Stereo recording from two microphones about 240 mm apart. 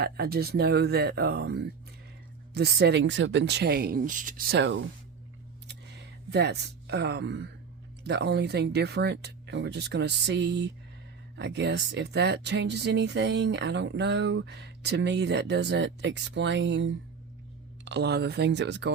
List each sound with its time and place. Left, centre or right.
0.0 s speech: right
5.6 s a sound: right
8.0 s speech: right